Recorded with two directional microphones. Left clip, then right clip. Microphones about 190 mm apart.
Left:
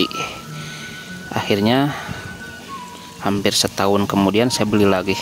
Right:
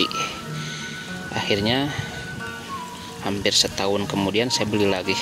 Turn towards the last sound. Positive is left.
turn(degrees=40)  # may be behind; listen again after turning